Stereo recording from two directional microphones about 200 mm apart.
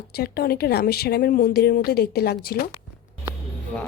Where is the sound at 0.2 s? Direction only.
50° left (ahead or behind).